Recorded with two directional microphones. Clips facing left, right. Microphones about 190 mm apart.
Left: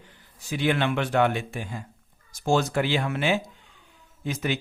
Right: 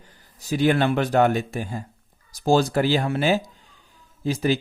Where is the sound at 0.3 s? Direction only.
40° right (ahead or behind).